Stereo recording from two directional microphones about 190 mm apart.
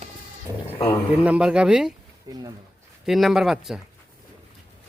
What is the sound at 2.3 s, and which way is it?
Speech, 20° right (ahead or behind).